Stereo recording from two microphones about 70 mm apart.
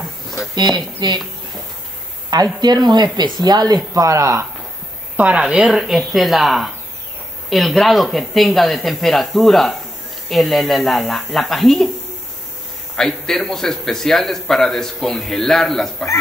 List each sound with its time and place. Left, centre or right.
0.6 s speech: right
2.6 s speech: right
3.3 s speech: right
5.1 s speech: centre
5.5 s a man's voice: centre
12.9 s a man's voice: centre